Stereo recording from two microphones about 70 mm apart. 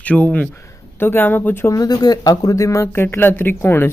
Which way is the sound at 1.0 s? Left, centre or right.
Left.